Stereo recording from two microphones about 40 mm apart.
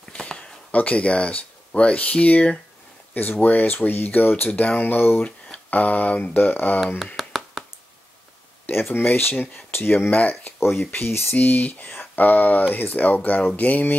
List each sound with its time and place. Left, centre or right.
0.4 s speech: left
4.5 s speech: left
6.3 s speech: left
7.2 s a sound: centre
8.6 s speech: left
9.0 s speech: left
10.6 s speech: left
11.1 s speech: left
11.3 s speech: left